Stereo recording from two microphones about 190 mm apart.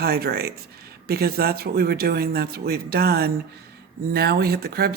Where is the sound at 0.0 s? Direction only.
55° right (ahead or behind).